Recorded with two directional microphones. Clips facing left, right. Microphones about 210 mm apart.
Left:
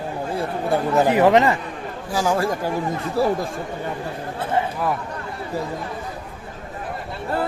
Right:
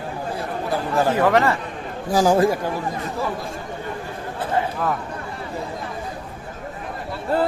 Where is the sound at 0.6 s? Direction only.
25° left (ahead or behind).